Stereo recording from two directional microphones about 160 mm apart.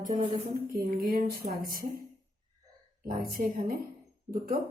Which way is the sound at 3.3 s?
65° right (ahead or behind).